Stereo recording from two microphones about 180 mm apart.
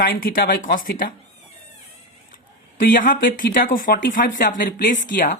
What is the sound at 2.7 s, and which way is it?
Speech, 50° left (ahead or behind).